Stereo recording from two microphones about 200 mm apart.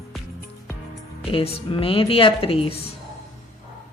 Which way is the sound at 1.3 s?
25° left (ahead or behind).